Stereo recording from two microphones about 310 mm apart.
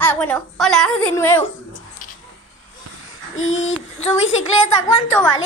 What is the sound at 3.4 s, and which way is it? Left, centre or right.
Speech, left.